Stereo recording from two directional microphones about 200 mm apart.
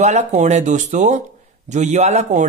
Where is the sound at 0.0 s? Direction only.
35° right (ahead or behind).